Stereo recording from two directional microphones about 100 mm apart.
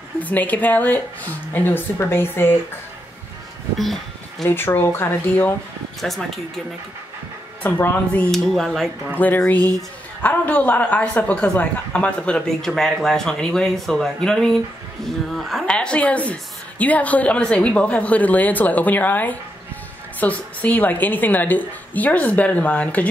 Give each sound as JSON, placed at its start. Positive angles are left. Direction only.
{"t": 0.2, "sound": "speech", "side_deg": 15}
{"t": 3.7, "sound": "speech", "side_deg": 0}
{"t": 4.5, "sound": "speech", "side_deg": 20}
{"t": 5.9, "sound": "speech", "side_deg": 0}
{"t": 7.6, "sound": "a man's voice", "side_deg": 15}
{"t": 8.3, "sound": "speech", "side_deg": 5}
{"t": 9.2, "sound": "a man's voice", "side_deg": 15}